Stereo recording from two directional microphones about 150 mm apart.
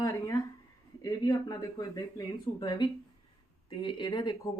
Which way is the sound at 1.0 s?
25° left (ahead or behind).